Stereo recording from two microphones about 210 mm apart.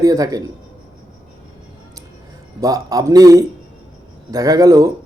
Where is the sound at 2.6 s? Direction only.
15° right (ahead or behind).